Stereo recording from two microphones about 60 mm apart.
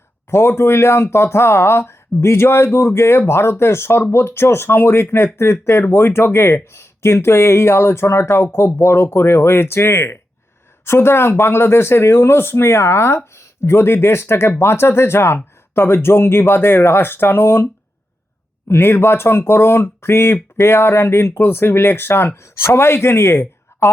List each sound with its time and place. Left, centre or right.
0.3 s speech: left
18.7 s speech: left